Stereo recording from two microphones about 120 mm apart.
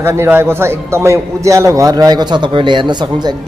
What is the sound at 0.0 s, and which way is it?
A man's voice, 20° right (ahead or behind).